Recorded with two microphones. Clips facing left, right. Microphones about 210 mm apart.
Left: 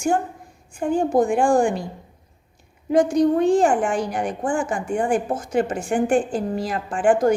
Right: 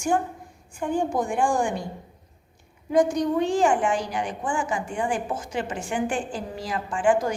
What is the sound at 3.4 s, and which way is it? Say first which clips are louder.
A woman's voice: left 4 dB; 55° left (ahead or behind).